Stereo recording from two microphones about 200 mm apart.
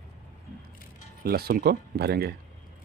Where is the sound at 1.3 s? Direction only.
50° right (ahead or behind).